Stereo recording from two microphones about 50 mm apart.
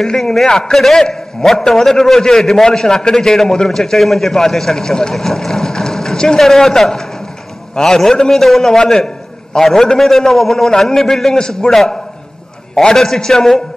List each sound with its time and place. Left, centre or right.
0.0 s a man's voice: centre